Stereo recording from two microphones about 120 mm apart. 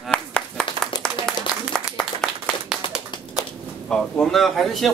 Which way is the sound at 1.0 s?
5° left (ahead or behind).